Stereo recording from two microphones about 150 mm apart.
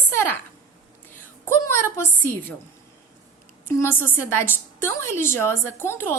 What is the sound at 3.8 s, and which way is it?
A woman's voice, 15° left (ahead or behind).